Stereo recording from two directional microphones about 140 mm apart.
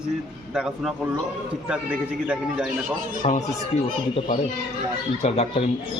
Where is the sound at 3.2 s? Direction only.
55° left (ahead or behind).